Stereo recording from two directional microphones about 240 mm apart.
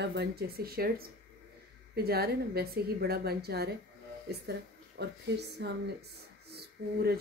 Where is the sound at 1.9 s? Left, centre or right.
Right.